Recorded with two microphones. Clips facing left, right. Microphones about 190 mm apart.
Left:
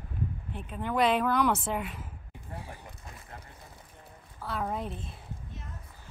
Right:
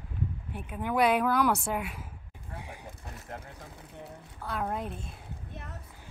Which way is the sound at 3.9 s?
75° right (ahead or behind).